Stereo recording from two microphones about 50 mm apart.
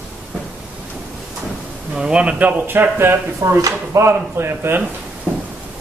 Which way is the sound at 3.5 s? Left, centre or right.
Right.